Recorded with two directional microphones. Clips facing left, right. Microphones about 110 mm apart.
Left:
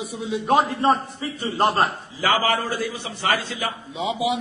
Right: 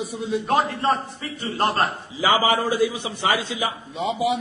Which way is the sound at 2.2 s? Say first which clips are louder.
Right 2 dB; 15° right (ahead or behind).